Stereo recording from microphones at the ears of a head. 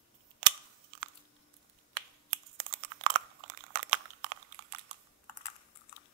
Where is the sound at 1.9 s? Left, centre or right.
Right.